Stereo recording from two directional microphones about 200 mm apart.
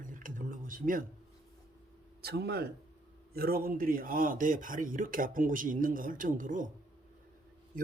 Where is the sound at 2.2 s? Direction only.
55° right (ahead or behind).